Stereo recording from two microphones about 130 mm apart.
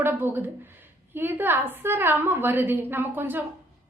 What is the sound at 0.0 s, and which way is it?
A woman's voice, 15° right (ahead or behind).